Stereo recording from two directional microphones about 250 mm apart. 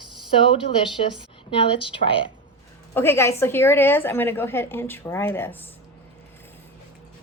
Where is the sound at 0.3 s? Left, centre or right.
Left.